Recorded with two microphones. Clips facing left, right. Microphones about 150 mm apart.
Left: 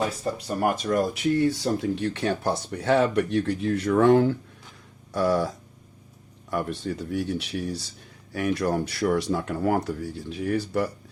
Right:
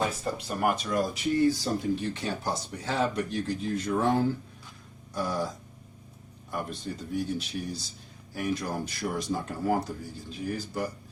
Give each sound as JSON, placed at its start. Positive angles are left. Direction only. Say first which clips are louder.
{"t": 0.3, "sound": "speech", "louder": "left 3 dB", "side_deg": 40}
{"t": 0.9, "sound": "speech", "louder": "left 5 dB", "side_deg": 65}
{"t": 6.5, "sound": "speech", "louder": "left 6 dB", "side_deg": 75}